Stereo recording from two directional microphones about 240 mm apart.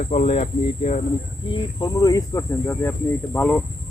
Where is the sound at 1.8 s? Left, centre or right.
Centre.